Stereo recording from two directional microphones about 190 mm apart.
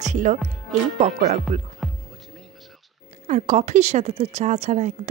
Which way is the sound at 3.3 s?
40° right (ahead or behind).